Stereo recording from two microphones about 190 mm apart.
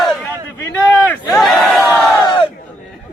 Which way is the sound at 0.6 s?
10° left (ahead or behind).